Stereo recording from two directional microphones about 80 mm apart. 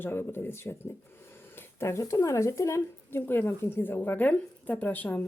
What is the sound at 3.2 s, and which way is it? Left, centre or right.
A woman's voice, left.